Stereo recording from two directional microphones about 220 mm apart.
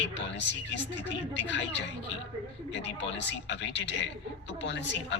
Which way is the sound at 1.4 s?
55° left (ahead or behind).